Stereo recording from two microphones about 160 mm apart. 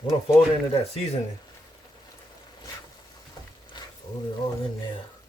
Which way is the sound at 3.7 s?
30° left (ahead or behind).